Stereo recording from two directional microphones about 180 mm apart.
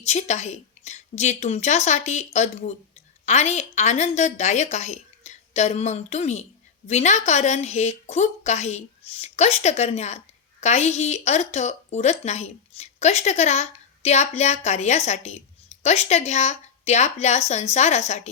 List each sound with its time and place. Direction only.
0.0 s a woman's voice: 40° left (ahead or behind)